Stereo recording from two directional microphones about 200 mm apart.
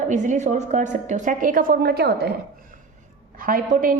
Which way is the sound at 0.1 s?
40° right (ahead or behind).